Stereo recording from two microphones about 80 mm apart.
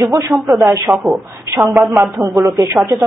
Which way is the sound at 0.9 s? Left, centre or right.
Centre.